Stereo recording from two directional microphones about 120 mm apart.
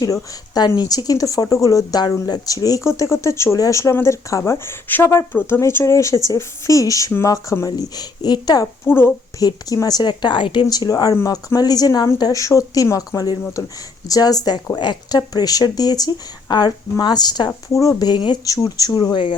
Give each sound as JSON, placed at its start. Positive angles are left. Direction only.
{"t": 0.0, "sound": "a woman's voice", "side_deg": 35}
{"t": 8.9, "sound": "speech", "side_deg": 20}
{"t": 9.4, "sound": "a woman's voice", "side_deg": 30}